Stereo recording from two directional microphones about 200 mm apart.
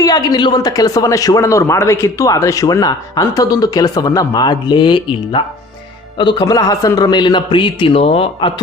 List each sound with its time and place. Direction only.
0.0 s a man's voice: 20° left (ahead or behind)